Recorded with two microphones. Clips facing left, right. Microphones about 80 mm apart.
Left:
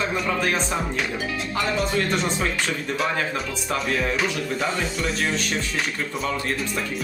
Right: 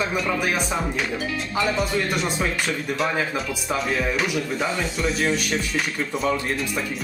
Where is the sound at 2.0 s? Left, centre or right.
Centre.